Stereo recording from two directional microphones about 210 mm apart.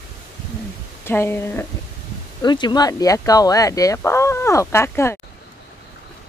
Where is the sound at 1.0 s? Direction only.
10° left (ahead or behind).